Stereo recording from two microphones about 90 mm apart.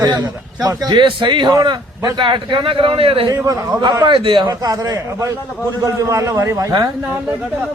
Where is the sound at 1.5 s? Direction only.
50° right (ahead or behind); by 3.3 s 90° right.